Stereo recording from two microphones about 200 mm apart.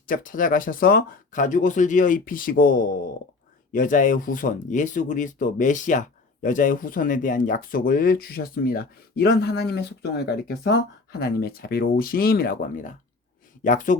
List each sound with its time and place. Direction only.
0.1 s speech: 45° left (ahead or behind)